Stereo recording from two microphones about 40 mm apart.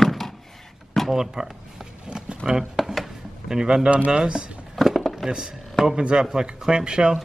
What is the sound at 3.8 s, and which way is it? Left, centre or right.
Speech, right.